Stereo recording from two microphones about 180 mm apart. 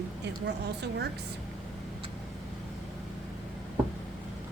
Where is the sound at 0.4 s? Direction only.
70° right (ahead or behind).